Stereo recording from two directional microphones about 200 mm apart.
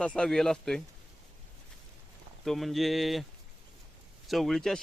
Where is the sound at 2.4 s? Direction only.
Centre (ahead or behind).